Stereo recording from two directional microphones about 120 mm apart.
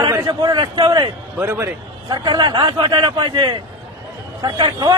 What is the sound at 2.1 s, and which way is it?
A man's voice, 35° right (ahead or behind).